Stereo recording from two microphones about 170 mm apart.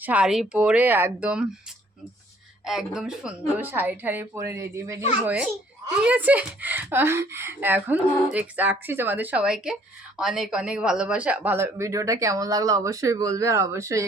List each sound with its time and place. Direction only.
0.0 s speech: 5° right (ahead or behind)
2.6 s a child's voice: centre (ahead or behind); by 14.0 s 20° right (ahead or behind)